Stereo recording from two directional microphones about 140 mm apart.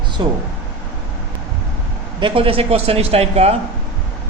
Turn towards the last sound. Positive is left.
turn(degrees=-50)  # may be behind; listen again after turning